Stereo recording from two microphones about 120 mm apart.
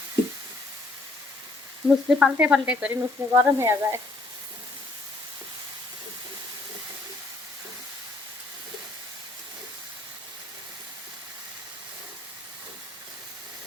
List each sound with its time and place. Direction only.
1.9 s frying: 5° right (ahead or behind)
2.9 s speech: 20° right (ahead or behind)